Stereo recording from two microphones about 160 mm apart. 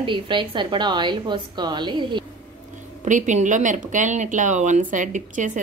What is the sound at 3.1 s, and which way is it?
Speech, 50° right (ahead or behind).